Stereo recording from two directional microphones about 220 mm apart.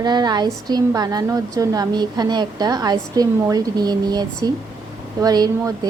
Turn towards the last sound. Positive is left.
turn(degrees=-20)  # may be behind; listen again after turning